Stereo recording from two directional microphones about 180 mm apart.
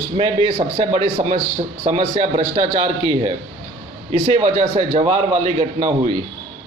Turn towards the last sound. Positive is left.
turn(degrees=-35)  # may be behind; listen again after turning